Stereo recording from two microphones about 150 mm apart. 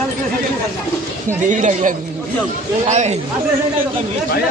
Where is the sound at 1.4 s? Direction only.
55° right (ahead or behind).